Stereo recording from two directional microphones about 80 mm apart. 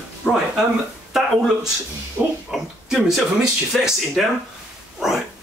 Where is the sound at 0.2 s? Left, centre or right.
Centre.